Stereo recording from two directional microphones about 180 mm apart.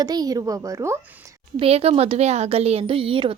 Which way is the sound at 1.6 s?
35° right (ahead or behind).